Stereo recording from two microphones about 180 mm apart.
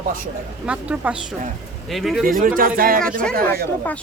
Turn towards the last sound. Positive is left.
turn(degrees=-55)  # may be behind; listen again after turning